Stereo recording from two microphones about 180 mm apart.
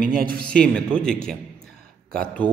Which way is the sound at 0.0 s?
50° right (ahead or behind).